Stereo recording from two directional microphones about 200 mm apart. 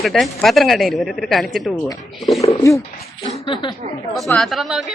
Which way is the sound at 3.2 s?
30° left (ahead or behind).